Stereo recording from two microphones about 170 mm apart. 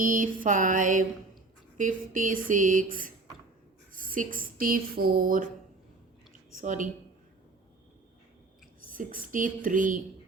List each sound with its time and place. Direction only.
0.0 s speech: 50° right (ahead or behind)
6.5 s a woman's voice: 50° right (ahead or behind)
8.9 s speech: 55° right (ahead or behind)